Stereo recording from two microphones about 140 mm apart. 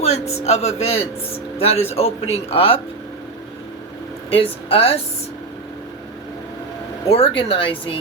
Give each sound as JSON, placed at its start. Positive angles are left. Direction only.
{"t": 0.0, "sound": "a sound", "side_deg": 50}
{"t": 0.4, "sound": "speech", "side_deg": 50}
{"t": 4.3, "sound": "speech", "side_deg": 45}
{"t": 7.1, "sound": "speech", "side_deg": 40}